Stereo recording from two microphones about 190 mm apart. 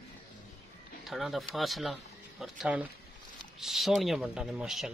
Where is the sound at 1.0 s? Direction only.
Centre (ahead or behind).